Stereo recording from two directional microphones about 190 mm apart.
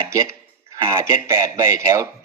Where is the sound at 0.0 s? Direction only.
15° right (ahead or behind).